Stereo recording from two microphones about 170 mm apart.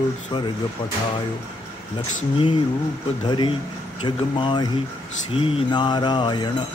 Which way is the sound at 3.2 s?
25° left (ahead or behind).